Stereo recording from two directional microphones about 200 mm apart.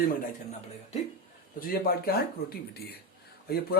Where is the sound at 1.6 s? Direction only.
50° left (ahead or behind).